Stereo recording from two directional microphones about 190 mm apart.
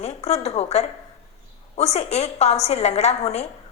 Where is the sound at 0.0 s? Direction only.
35° left (ahead or behind).